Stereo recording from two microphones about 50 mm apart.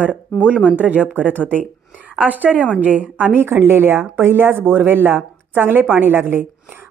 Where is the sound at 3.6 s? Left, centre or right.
Right.